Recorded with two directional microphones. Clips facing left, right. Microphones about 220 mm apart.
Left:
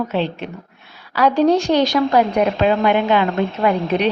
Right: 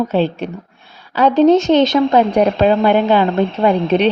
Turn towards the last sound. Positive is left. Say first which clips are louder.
# right 4 dB
turn(degrees=-30)  # may be behind; listen again after turning